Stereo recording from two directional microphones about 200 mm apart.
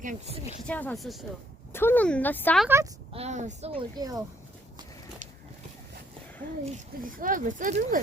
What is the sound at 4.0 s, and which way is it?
Speech, 20° right (ahead or behind).